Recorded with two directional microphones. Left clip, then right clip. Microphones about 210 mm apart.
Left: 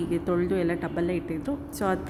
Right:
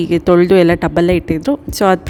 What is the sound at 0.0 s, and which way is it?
A woman's voice, 45° right (ahead or behind).